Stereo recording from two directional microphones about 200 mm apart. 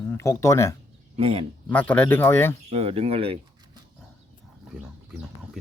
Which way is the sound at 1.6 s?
5° left (ahead or behind).